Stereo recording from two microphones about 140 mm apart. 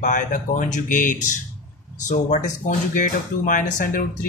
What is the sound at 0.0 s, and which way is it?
Speech, 65° left (ahead or behind).